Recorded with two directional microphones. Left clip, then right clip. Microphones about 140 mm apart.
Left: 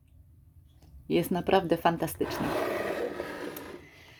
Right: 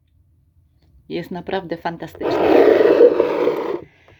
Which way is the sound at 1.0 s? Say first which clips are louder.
Even; 10° left (ahead or behind).